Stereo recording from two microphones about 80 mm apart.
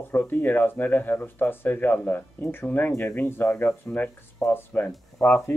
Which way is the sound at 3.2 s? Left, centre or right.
Left.